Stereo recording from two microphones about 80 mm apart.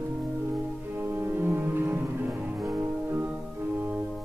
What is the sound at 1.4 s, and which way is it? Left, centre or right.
Music, right.